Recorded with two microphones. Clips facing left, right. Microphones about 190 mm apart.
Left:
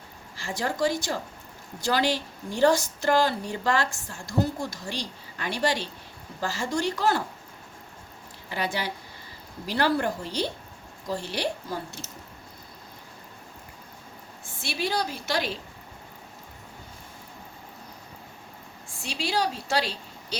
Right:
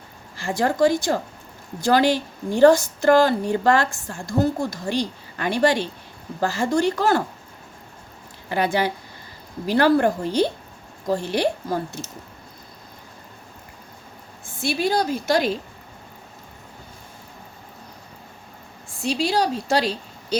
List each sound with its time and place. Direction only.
0.3 s a woman's voice: 55° right (ahead or behind)
8.4 s a woman's voice: 55° right (ahead or behind)
14.4 s a woman's voice: 45° right (ahead or behind)
19.0 s speech: 40° right (ahead or behind)